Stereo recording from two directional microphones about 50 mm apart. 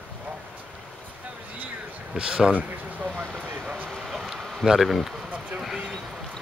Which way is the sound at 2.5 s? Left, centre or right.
Right.